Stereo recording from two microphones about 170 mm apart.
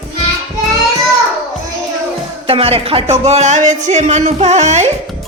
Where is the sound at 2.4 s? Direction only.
35° right (ahead or behind).